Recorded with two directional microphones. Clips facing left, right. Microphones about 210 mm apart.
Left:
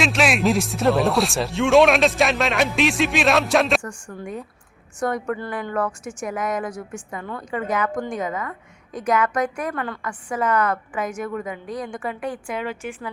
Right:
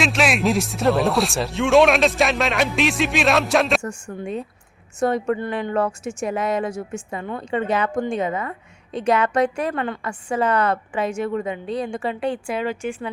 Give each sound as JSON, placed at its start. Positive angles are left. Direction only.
{"t": 0.0, "sound": "speech", "side_deg": 0}
{"t": 3.8, "sound": "speech", "side_deg": -25}